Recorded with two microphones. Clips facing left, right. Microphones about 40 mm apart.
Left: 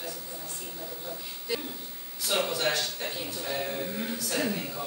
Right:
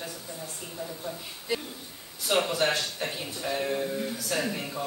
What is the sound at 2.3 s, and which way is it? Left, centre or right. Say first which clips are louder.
A man's voice: right 3 dB; centre.